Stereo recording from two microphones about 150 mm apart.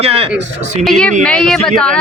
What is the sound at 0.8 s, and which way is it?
A woman's voice, 5° left (ahead or behind).